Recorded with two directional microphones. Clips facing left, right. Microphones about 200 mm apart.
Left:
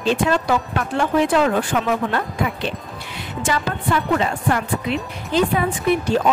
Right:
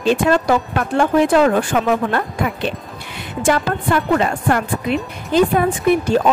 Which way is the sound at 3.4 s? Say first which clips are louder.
Right 5 dB; 55° right (ahead or behind).